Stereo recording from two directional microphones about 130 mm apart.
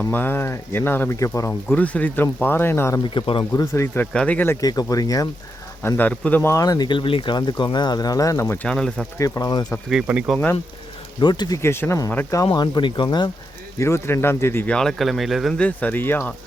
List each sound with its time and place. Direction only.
0.1 s speech: 15° left (ahead or behind)
1.6 s speech: 10° left (ahead or behind)
3.2 s speech: 40° left (ahead or behind)
3.5 s speech: 20° left (ahead or behind)
4.6 s speech: 30° left (ahead or behind)
5.8 s speech: 10° left (ahead or behind)
9.1 s speech: 25° left (ahead or behind)
9.9 s speech: 10° right (ahead or behind)
11.2 s speech: 35° left (ahead or behind)
12.5 s speech: 35° left (ahead or behind)
13.7 s speech: 20° left (ahead or behind); by 15.6 s centre (ahead or behind)
15.6 s speech: 10° left (ahead or behind)